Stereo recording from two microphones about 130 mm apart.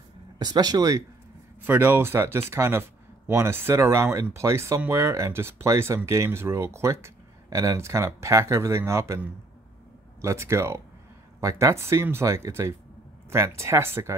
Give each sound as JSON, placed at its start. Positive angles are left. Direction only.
{"t": 0.4, "sound": "speech", "side_deg": -30}
{"t": 1.6, "sound": "speech", "side_deg": -15}
{"t": 10.2, "sound": "speech", "side_deg": -20}